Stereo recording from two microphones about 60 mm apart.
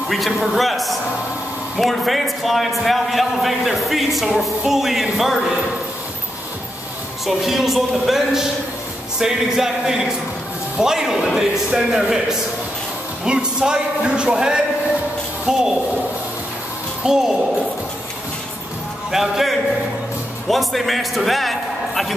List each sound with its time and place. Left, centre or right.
0.1 s a man's voice: centre
7.2 s a man's voice: centre
17.0 s speech: centre
19.0 s a man's voice: centre